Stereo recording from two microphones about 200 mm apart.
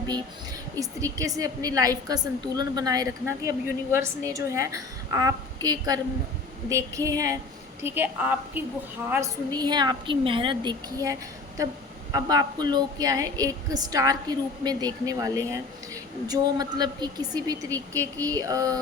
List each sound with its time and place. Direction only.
0.8 s a woman's voice: 15° right (ahead or behind)